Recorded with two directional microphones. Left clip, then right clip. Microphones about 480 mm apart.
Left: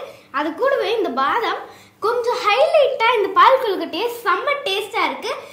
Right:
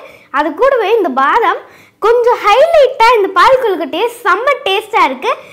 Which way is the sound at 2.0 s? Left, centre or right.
Right.